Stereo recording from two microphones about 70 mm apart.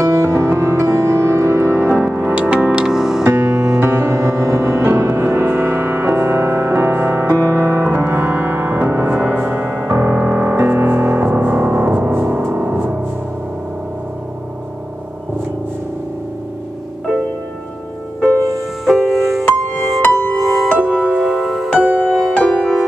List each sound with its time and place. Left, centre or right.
0.0 s music: right
1.9 s music: right
3.3 s music: right
8.1 s music: right
10.5 s music: right
18.5 s music: centre
21.7 s music: centre